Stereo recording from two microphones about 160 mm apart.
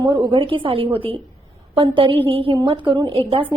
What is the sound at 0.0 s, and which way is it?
A woman's voice, 30° right (ahead or behind).